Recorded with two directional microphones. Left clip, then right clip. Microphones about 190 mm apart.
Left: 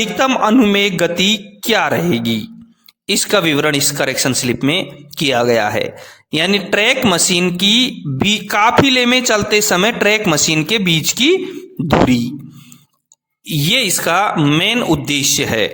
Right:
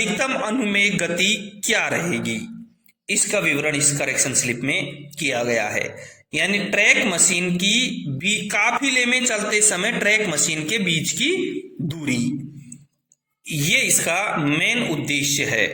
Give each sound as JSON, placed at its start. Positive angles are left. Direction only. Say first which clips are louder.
{"t": 0.0, "sound": "a man's voice", "louder": "left 8 dB", "side_deg": 50}
{"t": 13.5, "sound": "a man's voice", "louder": "left 4 dB", "side_deg": 45}